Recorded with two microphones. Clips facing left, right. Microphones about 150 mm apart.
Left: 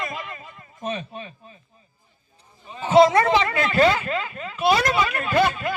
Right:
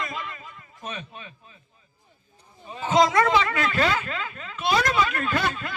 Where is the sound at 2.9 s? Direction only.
30° left (ahead or behind).